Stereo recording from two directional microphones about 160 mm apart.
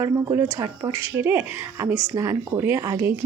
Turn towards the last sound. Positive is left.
turn(degrees=-20)  # may be behind; listen again after turning